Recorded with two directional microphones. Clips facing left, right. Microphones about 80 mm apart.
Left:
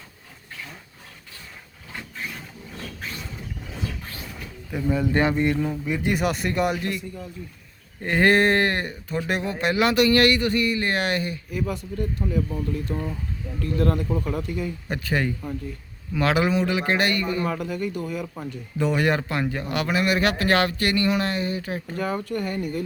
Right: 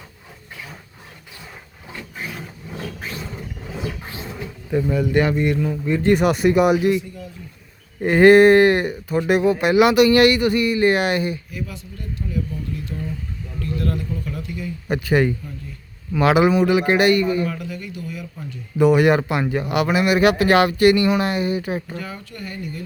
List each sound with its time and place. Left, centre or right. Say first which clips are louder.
4.0 s a sound: right 6 dB; right
4.9 s speech: right 1 dB; left
5.8 s speech: right 8 dB; centre
6.1 s speech: right 7 dB; centre
8.0 s speech: right 8 dB; centre
11.6 s a man's voice: left 5 dB; left
14.8 s speech: right 9 dB; centre
17.4 s speech: left 1 dB; left
18.8 s speech: right 8 dB; centre
22.0 s a man's voice: left 7 dB; left